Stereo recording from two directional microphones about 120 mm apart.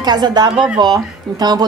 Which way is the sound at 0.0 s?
35° right (ahead or behind).